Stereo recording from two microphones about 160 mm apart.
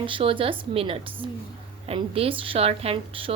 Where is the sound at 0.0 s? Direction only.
35° right (ahead or behind).